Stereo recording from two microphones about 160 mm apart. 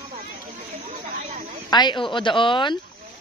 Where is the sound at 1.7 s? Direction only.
30° left (ahead or behind).